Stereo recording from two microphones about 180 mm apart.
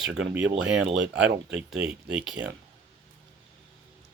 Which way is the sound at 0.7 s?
80° right.